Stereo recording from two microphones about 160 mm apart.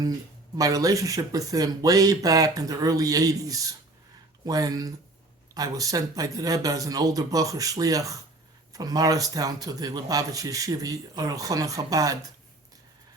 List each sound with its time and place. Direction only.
0.5 s speech: 20° right (ahead or behind)